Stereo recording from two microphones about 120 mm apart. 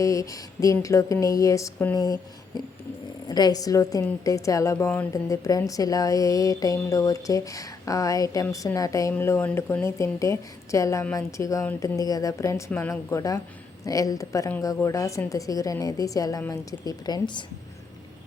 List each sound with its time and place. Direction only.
0.0 s a woman's voice: 25° left (ahead or behind)
3.2 s a woman's voice: 35° left (ahead or behind)